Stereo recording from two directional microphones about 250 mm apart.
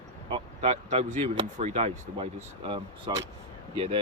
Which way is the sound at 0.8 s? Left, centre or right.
Right.